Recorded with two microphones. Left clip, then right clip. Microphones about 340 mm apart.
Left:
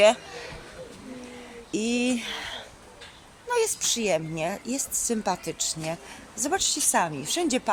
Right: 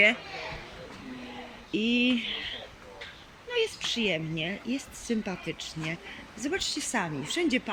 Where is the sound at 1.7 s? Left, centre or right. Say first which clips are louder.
Even; centre.